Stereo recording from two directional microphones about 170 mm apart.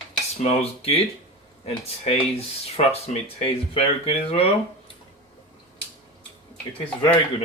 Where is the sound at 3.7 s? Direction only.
35° left (ahead or behind).